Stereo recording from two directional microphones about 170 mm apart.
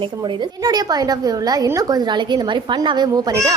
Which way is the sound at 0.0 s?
25° right (ahead or behind).